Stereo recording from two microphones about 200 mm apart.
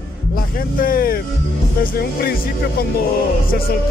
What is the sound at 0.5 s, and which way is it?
Vehicle, 45° left (ahead or behind).